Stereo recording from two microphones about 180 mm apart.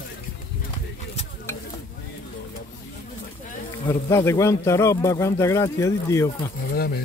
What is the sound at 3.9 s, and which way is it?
A man's voice, 15° left (ahead or behind).